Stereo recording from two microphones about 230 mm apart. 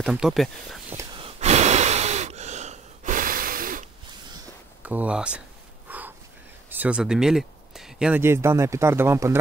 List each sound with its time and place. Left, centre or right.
0.0 s speech: centre
0.9 s gasp: right
4.8 s speech: centre
5.9 s a sound: centre
6.7 s speech: centre